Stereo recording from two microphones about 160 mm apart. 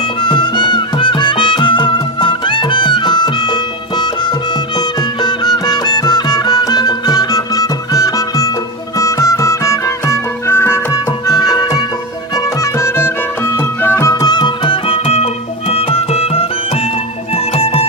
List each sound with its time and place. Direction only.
0.2 s music: 30° left (ahead or behind)